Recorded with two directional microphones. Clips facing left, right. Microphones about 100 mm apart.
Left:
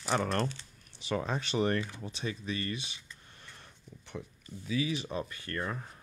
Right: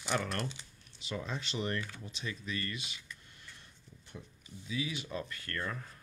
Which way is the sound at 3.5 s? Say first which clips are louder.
Left 5 dB; 75° left (ahead or behind).